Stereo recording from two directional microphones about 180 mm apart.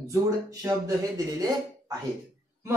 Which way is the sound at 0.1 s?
15° right (ahead or behind).